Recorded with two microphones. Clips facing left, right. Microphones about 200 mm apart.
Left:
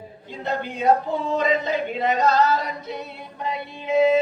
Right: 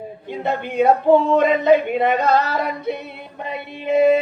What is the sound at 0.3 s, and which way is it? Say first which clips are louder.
Speech: right 4 dB; 60° right (ahead or behind).